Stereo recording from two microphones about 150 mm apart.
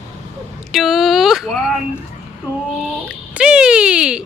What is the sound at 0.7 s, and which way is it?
Speech, centre (ahead or behind).